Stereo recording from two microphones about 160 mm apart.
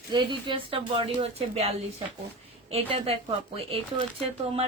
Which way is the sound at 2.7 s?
35° right (ahead or behind).